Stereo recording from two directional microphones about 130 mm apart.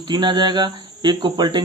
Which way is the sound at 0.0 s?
35° right (ahead or behind).